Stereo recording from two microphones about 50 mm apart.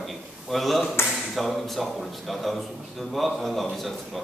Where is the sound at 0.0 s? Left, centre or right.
Centre.